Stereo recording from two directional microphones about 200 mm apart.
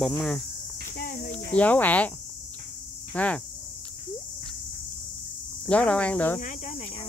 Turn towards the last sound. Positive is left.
turn(degrees=35)  # may be behind; listen again after turning